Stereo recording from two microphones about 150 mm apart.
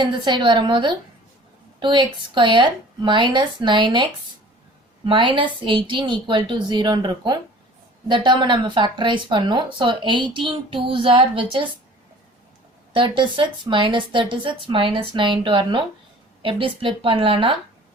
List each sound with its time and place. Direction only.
0.0 s speech: 30° right (ahead or behind)
12.9 s speech: 35° right (ahead or behind)